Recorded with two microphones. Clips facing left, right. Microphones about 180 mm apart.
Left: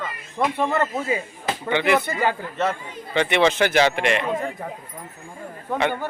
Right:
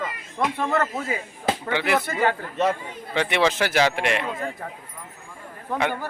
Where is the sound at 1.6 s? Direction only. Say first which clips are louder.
Left 6 dB; 5° right (ahead or behind).